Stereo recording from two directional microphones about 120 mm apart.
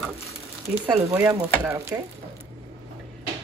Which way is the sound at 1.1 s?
20° right (ahead or behind).